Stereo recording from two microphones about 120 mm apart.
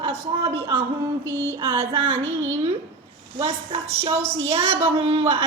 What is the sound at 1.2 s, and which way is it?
Music, 20° left (ahead or behind).